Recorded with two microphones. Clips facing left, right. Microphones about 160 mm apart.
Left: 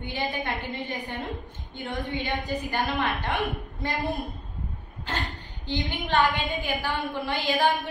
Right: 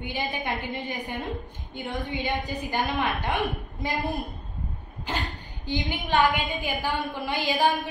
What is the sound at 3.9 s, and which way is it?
Speech, centre (ahead or behind).